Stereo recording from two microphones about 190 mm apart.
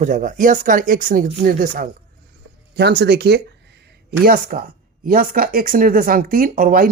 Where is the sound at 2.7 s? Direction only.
60° right (ahead or behind).